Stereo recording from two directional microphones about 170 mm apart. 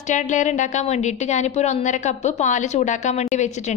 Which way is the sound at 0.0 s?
45° left (ahead or behind).